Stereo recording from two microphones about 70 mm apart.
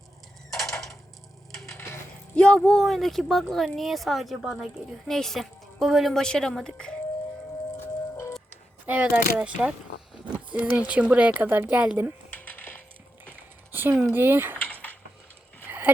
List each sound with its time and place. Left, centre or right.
0.6 s a sound: centre
2.3 s a woman's voice: centre
5.0 s speech: centre
7.8 s music: left
8.9 s speech: centre
12.3 s a sound: left
13.7 s speech: right
14.7 s a sound: left
15.6 s dog: right